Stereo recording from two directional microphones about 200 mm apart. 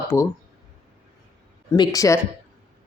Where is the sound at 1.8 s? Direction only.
15° left (ahead or behind).